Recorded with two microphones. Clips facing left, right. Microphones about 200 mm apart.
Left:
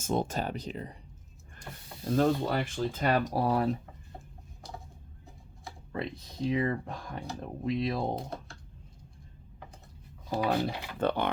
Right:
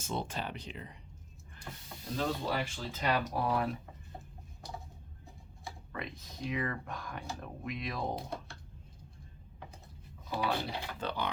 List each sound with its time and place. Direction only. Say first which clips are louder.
0.0 s speech: left 7 dB; 45° left (ahead or behind)
2.1 s speech: left 7 dB; 50° left (ahead or behind); by 3.8 s 35° left (ahead or behind)
5.9 s speech: left 8 dB; 30° left (ahead or behind)
10.2 s speech: left 5 dB; 45° left (ahead or behind)